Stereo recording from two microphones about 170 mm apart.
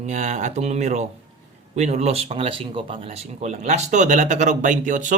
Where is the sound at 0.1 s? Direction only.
45° right (ahead or behind).